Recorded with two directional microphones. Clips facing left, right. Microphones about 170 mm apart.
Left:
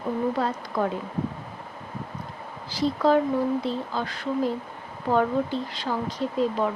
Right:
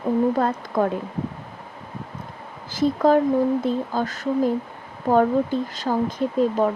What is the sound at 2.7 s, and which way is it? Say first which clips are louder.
Speech: right 4 dB; 50° right (ahead or behind).